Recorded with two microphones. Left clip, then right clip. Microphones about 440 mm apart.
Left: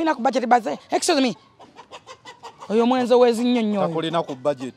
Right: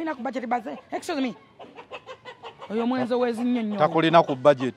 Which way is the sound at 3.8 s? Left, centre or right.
Centre.